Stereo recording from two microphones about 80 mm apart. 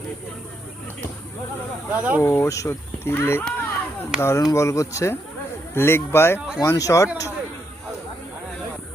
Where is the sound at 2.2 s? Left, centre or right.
Left.